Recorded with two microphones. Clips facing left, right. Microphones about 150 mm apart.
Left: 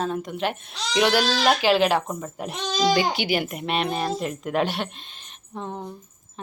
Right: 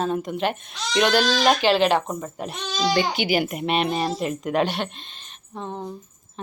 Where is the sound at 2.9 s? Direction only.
Centre (ahead or behind).